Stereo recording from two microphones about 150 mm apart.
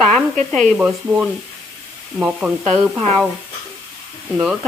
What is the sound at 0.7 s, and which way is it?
Speech, 10° right (ahead or behind).